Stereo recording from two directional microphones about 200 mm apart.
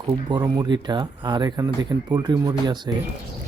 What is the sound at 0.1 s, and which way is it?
Speech, 20° right (ahead or behind).